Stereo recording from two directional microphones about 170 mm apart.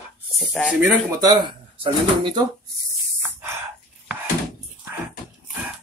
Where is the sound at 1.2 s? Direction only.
25° right (ahead or behind).